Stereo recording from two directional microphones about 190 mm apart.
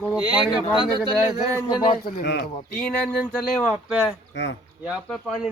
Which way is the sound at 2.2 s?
70° left (ahead or behind).